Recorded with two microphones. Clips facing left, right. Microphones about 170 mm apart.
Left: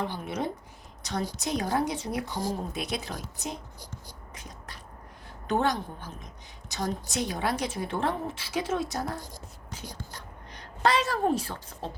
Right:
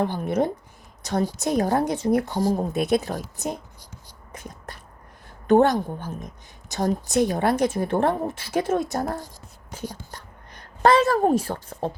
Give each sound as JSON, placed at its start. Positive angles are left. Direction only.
{"t": 0.0, "sound": "a woman's voice", "side_deg": -50}
{"t": 4.3, "sound": "a sound", "side_deg": -50}
{"t": 5.5, "sound": "a woman's voice", "side_deg": -50}